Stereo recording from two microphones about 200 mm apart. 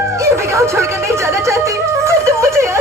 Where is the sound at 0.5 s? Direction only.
15° right (ahead or behind).